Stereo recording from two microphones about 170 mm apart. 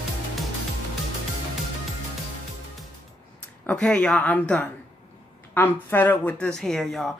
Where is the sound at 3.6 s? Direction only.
10° left (ahead or behind).